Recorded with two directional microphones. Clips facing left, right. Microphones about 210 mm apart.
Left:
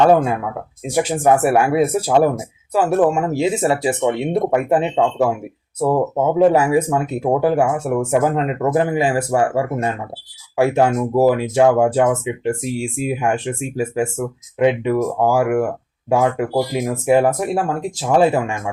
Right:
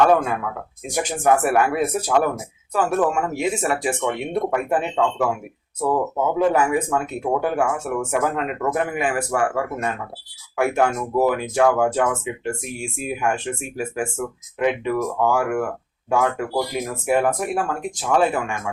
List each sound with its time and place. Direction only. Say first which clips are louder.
0.9 s speech: left 4 dB; 30° left (ahead or behind)